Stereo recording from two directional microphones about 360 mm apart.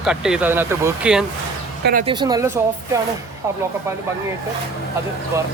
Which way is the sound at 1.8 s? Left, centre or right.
Right.